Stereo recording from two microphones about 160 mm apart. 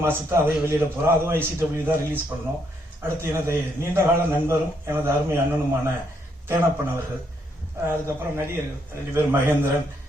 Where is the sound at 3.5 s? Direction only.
15° right (ahead or behind).